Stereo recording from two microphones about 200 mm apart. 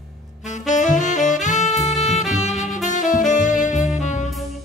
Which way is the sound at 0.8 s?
40° left (ahead or behind).